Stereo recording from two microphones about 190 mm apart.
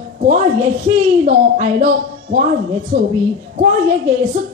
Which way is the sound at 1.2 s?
40° right (ahead or behind).